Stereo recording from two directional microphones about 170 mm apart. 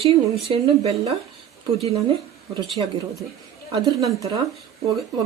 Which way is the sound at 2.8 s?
25° right (ahead or behind).